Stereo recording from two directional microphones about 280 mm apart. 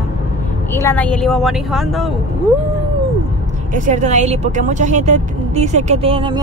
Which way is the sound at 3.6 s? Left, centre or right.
Right.